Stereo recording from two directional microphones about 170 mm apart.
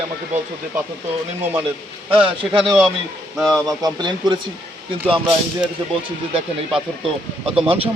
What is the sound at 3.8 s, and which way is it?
Speech, 25° right (ahead or behind).